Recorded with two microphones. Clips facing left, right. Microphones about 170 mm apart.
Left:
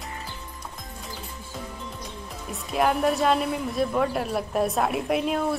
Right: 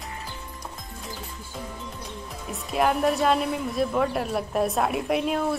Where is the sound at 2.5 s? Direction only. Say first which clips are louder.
Even; centre (ahead or behind).